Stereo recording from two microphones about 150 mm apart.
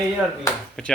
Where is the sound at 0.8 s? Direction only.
5° left (ahead or behind).